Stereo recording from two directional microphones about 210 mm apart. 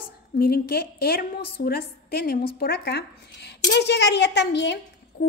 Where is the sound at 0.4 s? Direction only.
50° left (ahead or behind).